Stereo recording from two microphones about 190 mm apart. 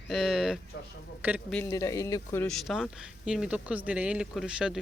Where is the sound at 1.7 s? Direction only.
20° left (ahead or behind).